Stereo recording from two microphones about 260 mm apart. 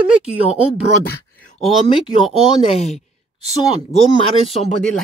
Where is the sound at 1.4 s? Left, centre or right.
Centre.